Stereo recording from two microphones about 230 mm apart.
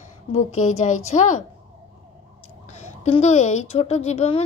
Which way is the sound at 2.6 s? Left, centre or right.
Left.